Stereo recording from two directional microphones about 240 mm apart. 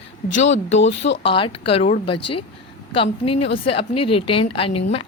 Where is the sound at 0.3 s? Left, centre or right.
Left.